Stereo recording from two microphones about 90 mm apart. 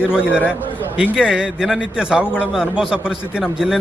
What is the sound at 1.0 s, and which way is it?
A man's voice, 10° right (ahead or behind).